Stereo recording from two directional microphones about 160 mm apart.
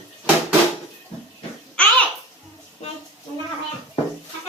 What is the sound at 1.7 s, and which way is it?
Babbling, 10° left (ahead or behind).